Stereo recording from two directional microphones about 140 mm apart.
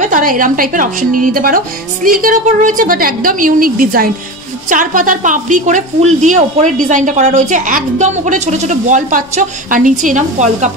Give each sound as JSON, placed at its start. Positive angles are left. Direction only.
{"t": 0.1, "sound": "a woman's voice", "side_deg": -80}
{"t": 2.0, "sound": "a woman's voice", "side_deg": -70}
{"t": 4.6, "sound": "a woman's voice", "side_deg": -70}